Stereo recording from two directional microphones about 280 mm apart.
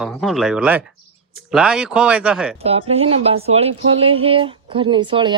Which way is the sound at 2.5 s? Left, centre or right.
Right.